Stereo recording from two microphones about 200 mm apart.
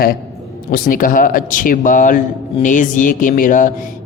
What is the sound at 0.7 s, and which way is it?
A man's voice, 45° left (ahead or behind).